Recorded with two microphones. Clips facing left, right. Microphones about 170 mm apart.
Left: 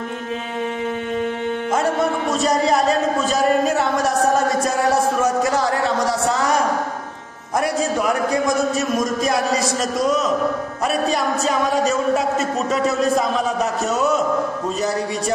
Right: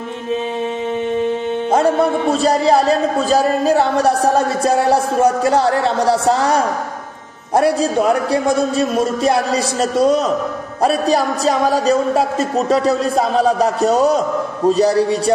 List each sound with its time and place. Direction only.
1.7 s a man's voice: 30° right (ahead or behind)